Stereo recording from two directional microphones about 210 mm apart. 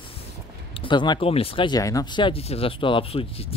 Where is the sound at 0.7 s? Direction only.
25° left (ahead or behind).